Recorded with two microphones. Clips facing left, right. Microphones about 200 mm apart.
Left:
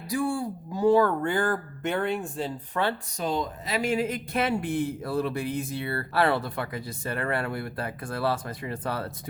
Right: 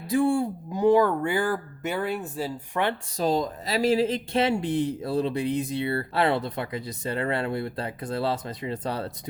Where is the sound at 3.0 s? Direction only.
35° right (ahead or behind).